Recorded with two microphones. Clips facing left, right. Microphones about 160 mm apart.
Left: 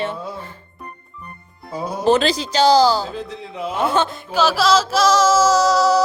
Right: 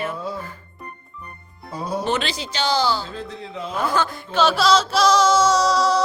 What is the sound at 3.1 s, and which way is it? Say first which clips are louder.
Speech: left 2 dB; 10° left (ahead or behind).